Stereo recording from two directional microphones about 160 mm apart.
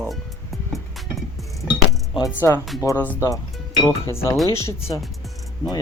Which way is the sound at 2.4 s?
15° left (ahead or behind).